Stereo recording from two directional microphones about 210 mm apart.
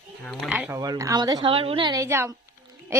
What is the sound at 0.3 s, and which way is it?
Speech, centre (ahead or behind).